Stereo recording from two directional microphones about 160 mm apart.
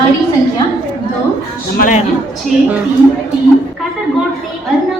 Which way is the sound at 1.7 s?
60° left (ahead or behind).